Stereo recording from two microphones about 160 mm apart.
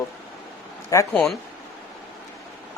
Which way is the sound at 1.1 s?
5° left (ahead or behind).